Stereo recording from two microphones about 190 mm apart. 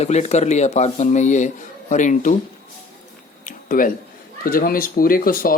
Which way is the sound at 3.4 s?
45° left (ahead or behind).